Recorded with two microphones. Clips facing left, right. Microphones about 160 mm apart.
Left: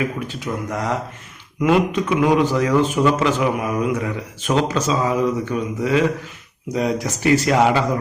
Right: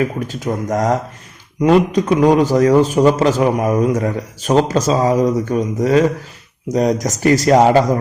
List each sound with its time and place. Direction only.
0.3 s a man's voice: 40° right (ahead or behind)